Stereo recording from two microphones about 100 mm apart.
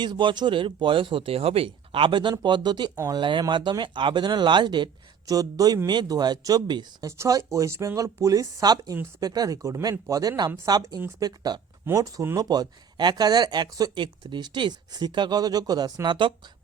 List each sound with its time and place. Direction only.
0.0 s speech: 50° right (ahead or behind)
7.1 s speech: 35° right (ahead or behind)
16.0 s speech: 55° right (ahead or behind)